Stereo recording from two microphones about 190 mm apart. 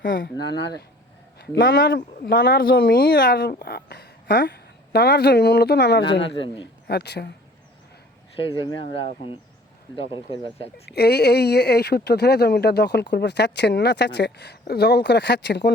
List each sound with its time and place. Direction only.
0.0 s speech: 50° left (ahead or behind)
1.7 s speech: 65° left (ahead or behind)
8.4 s speech: 25° left (ahead or behind)
10.8 s speech: 55° left (ahead or behind)